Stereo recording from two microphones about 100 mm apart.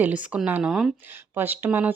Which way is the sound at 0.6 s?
5° right (ahead or behind).